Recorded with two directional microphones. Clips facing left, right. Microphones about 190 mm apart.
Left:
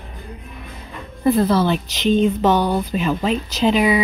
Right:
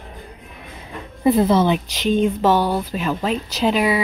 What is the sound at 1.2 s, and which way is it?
Speech, 20° right (ahead or behind).